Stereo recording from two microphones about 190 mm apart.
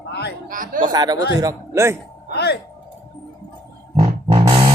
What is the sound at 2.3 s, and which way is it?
Speech, 60° left (ahead or behind).